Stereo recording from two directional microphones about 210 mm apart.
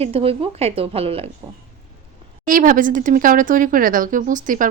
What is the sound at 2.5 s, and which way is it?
A woman's voice, 40° right (ahead or behind).